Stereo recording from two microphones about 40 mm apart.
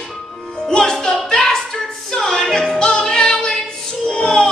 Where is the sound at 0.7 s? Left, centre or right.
Centre.